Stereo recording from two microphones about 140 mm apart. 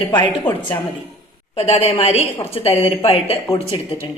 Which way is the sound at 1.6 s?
50° left (ahead or behind).